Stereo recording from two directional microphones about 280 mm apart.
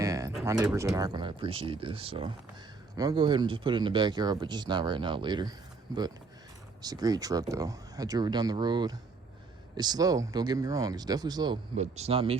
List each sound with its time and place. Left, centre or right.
0.0 s speech: centre